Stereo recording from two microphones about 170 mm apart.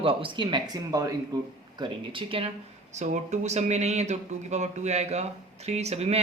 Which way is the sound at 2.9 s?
45° right (ahead or behind).